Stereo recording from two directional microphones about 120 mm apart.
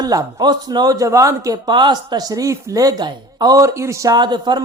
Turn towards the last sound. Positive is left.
turn(degrees=-35)  # may be behind; listen again after turning